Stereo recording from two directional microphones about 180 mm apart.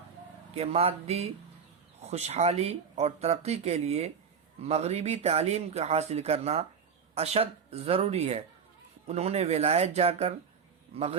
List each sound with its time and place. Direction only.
0.5 s a man's voice: 35° right (ahead or behind)